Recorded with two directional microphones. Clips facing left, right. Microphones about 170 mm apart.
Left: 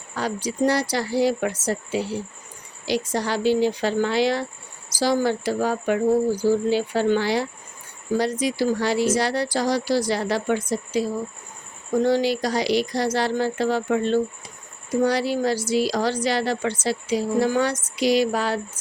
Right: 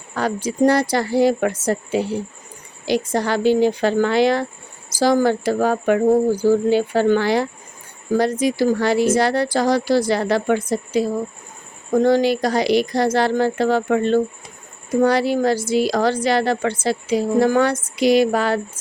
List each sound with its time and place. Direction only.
0.2 s speech: 50° right (ahead or behind)